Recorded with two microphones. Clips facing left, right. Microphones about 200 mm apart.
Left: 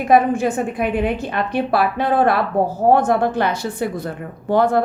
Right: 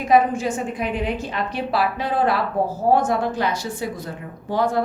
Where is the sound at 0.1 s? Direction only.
60° left (ahead or behind).